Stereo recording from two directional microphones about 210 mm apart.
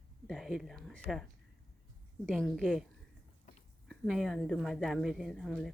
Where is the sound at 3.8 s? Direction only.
Centre (ahead or behind).